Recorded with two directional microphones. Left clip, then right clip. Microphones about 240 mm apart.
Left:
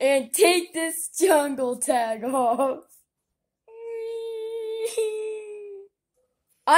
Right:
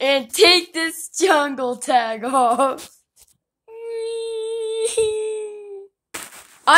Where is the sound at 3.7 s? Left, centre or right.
Right.